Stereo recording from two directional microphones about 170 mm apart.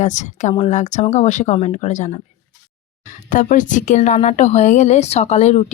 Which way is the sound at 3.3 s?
50° left (ahead or behind).